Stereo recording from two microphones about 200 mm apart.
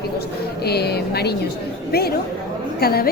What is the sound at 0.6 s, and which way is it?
A woman's voice, 55° left (ahead or behind).